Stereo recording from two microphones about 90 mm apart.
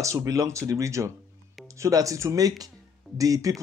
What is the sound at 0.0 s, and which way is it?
Speech, 35° right (ahead or behind).